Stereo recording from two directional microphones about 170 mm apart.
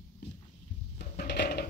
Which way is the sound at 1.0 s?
75° left (ahead or behind).